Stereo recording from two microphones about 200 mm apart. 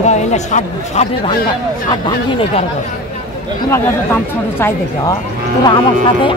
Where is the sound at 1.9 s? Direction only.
20° left (ahead or behind).